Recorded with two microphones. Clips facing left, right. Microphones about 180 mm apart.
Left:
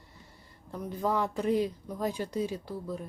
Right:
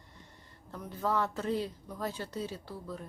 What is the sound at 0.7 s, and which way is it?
Speech, 15° left (ahead or behind).